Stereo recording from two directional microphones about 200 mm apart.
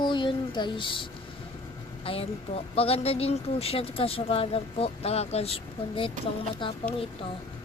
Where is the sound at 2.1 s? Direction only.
30° left (ahead or behind).